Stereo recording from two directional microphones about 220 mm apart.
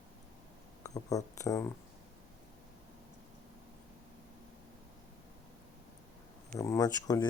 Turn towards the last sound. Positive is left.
turn(degrees=15)  # may be behind; listen again after turning